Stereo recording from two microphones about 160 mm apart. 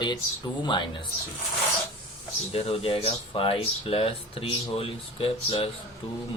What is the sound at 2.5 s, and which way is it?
Speech, 35° left (ahead or behind).